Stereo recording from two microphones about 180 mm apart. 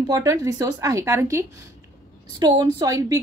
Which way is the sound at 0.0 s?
20° right (ahead or behind).